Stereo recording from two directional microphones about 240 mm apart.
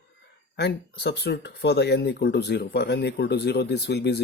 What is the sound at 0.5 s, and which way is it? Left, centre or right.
Speech, left.